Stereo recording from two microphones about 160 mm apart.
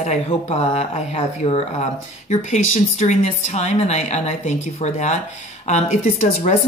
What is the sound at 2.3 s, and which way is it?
A woman's voice, 50° left (ahead or behind).